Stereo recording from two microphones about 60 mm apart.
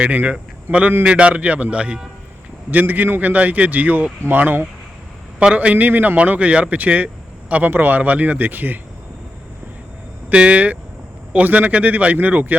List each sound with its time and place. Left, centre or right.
0.0 s speech: right
2.6 s speech: right
10.2 s speech: right